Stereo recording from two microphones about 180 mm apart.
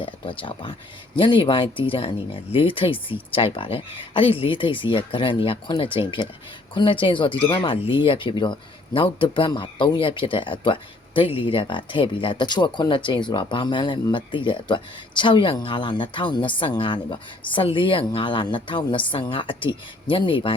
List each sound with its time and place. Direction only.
0.0 s speech: 30° left (ahead or behind)